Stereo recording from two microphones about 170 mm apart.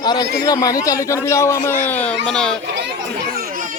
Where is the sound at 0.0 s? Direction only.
25° left (ahead or behind); by 2.6 s 5° left (ahead or behind).